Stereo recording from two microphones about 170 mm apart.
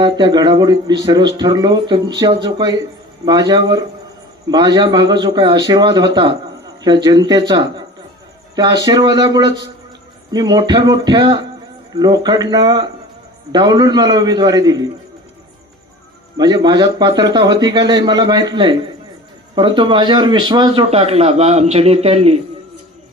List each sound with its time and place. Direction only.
0.0 s a man's voice: 25° right (ahead or behind)
16.4 s a man's voice: 25° right (ahead or behind)
20.9 s a man's voice: 35° right (ahead or behind)